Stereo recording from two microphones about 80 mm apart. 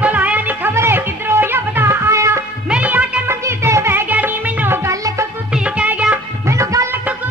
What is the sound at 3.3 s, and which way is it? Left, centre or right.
Music, right.